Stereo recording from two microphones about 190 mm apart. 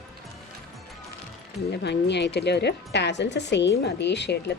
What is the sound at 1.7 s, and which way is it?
A woman's voice, 65° left (ahead or behind).